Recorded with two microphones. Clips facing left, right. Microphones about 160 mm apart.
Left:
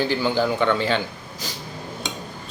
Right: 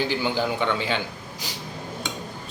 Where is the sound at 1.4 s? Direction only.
15° right (ahead or behind).